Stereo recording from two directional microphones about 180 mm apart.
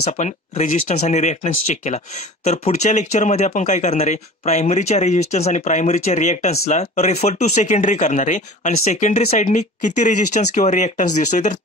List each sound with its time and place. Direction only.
0.0 s speech: 40° left (ahead or behind)